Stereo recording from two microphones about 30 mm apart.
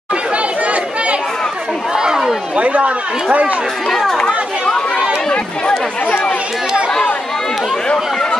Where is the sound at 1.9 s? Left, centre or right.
Right.